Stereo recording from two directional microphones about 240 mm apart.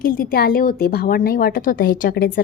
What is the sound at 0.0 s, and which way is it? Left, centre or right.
A woman's voice, left.